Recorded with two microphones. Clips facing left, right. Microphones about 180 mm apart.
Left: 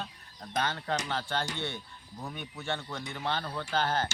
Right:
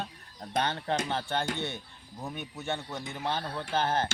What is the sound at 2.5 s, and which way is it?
A man's voice, 20° right (ahead or behind).